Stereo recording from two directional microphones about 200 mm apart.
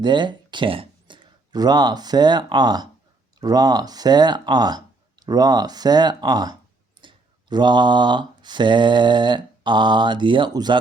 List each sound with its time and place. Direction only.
0.0 s speech: 25° right (ahead or behind)
3.4 s mantra: 20° right (ahead or behind)
7.0 s a sound: 25° right (ahead or behind)
7.5 s mantra: 20° right (ahead or behind)